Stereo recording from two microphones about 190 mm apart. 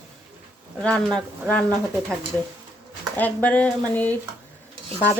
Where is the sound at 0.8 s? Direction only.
5° left (ahead or behind).